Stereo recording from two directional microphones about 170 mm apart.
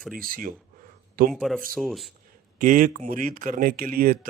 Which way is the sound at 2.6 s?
50° right (ahead or behind).